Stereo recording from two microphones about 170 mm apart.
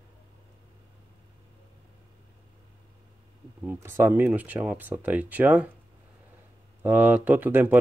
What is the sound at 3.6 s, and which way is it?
Speech, 15° right (ahead or behind).